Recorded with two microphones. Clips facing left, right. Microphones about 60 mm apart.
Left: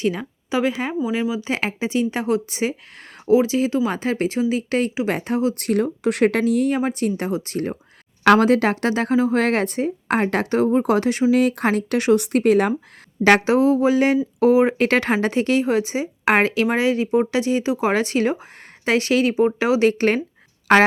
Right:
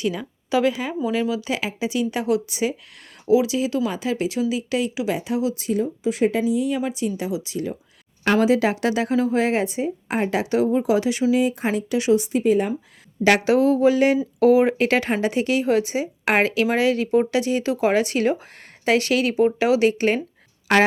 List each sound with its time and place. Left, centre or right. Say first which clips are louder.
0.0 s speech: left 2 dB; left
1.1 s a woman's voice: right 2 dB; left
1.4 s speech: left 2 dB; left
5.5 s speech: left 3 dB; left
6.7 s a woman's voice: left 3 dB; left
9.3 s a woman's voice: left 1 dB; left
13.2 s a woman's voice: left 2 dB; left
14.8 s a woman's voice: left 2 dB; left
19.9 s a woman's voice: left 2 dB; left